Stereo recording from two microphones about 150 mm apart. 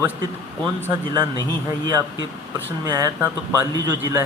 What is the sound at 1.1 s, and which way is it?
Speech, 30° right (ahead or behind).